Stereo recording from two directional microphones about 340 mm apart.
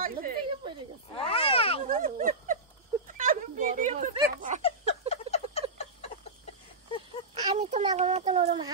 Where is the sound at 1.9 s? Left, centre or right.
Right.